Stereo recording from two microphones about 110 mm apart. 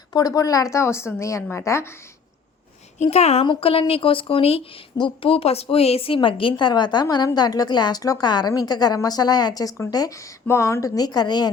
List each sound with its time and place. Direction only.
0.1 s a woman's voice: 35° left (ahead or behind)
3.0 s a woman's voice: 80° left
3.4 s speech: 50° left (ahead or behind)
4.9 s speech: 50° left (ahead or behind)
6.2 s a woman's voice: 50° left (ahead or behind)